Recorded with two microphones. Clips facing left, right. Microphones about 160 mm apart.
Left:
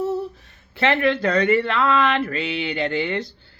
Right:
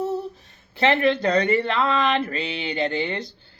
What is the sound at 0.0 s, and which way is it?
Speech, 20° right (ahead or behind).